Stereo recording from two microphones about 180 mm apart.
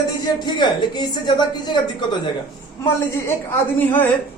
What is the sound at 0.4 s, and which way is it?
A woman's voice, 25° left (ahead or behind).